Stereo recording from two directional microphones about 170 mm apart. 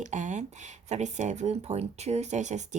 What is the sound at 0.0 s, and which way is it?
Speech, 45° right (ahead or behind).